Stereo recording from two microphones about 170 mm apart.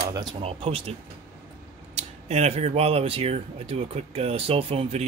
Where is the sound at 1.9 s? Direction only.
40° right (ahead or behind).